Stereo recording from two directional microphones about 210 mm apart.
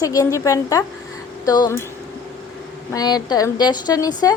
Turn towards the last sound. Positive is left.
turn(degrees=20)  # may be behind; listen again after turning